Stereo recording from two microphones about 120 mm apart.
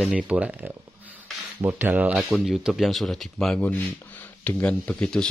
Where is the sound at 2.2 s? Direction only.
Centre (ahead or behind).